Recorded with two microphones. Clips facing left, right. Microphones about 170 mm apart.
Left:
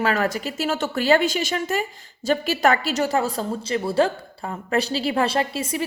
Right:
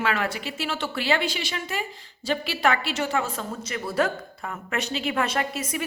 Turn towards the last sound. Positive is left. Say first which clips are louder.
# left 4 dB
turn(degrees=30)  # may be behind; listen again after turning